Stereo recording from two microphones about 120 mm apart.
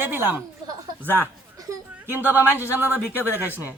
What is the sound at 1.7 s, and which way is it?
Speech, 15° right (ahead or behind).